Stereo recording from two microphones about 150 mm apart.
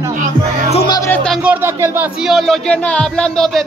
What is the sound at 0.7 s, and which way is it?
Speech, 30° left (ahead or behind).